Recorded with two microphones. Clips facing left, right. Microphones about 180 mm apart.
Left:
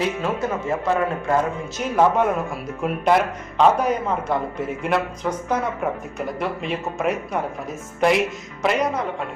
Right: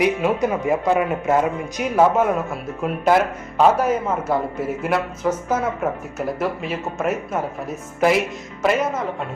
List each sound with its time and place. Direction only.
0.0 s a man's voice: 15° right (ahead or behind)